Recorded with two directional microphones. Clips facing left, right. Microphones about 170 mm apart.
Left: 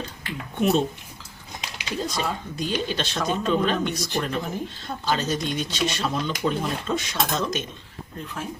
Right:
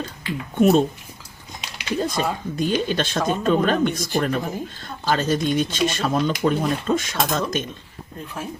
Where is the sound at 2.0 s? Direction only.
55° right (ahead or behind).